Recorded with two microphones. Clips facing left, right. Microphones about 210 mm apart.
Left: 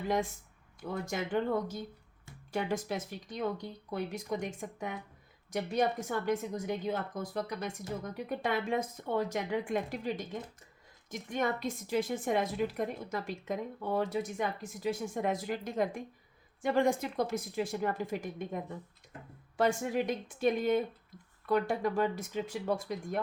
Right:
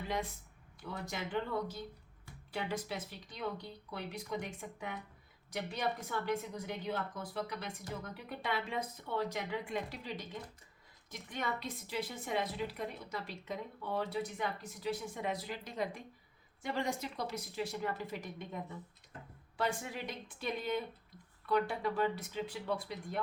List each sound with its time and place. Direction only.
0.8 s a woman's voice: 45° left (ahead or behind)